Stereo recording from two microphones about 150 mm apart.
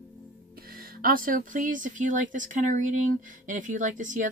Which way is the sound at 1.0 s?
65° right (ahead or behind).